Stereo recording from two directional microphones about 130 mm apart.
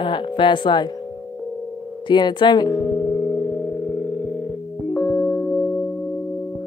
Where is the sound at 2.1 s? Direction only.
35° left (ahead or behind).